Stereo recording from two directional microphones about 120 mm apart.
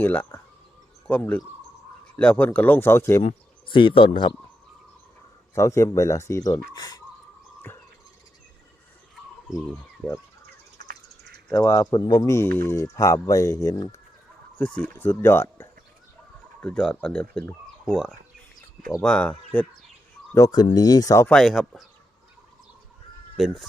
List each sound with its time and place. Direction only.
0.0 s speech: 15° left (ahead or behind)
3.7 s speech: 45° left (ahead or behind)
5.5 s speech: 25° left (ahead or behind)
10.0 s speech: 10° left (ahead or behind)
11.5 s speech: 35° left (ahead or behind)
14.6 s speech: 10° left (ahead or behind)
16.6 s speech: 10° left (ahead or behind)
20.3 s speech: 30° left (ahead or behind)
21.2 s speech: 5° left (ahead or behind)
23.4 s speech: centre (ahead or behind)